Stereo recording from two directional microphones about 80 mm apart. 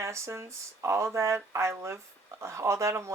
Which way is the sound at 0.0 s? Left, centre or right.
Right.